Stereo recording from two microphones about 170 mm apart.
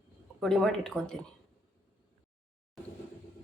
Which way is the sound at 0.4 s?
Centre (ahead or behind).